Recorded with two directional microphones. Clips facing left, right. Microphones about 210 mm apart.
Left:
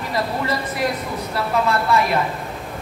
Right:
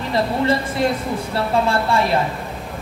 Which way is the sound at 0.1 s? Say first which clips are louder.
Right 5 dB; 25° right (ahead or behind).